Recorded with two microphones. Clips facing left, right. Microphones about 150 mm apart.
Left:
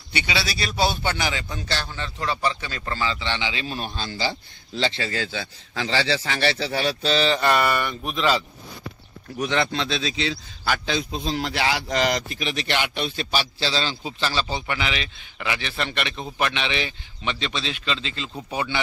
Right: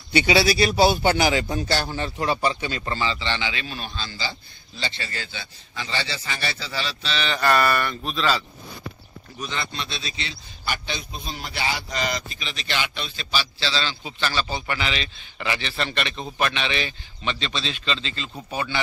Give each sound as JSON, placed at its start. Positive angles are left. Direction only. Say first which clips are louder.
{"t": 0.1, "sound": "speech", "louder": "right 8 dB", "side_deg": -40}
{"t": 2.1, "sound": "speech", "louder": "right 1 dB", "side_deg": -30}
{"t": 3.0, "sound": "a man's voice", "louder": "left 1 dB", "side_deg": 0}
{"t": 3.3, "sound": "a man's voice", "louder": "even", "side_deg": 20}
{"t": 3.6, "sound": "speech", "louder": "left 3 dB", "side_deg": 40}
{"t": 9.4, "sound": "a man's voice", "louder": "left 8 dB", "side_deg": 85}